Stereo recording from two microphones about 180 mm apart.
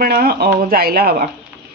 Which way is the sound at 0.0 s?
60° right (ahead or behind).